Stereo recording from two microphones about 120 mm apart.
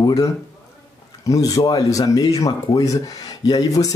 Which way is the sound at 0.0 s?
30° left (ahead or behind).